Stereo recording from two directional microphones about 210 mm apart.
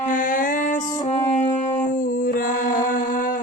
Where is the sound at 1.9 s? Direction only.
40° left (ahead or behind).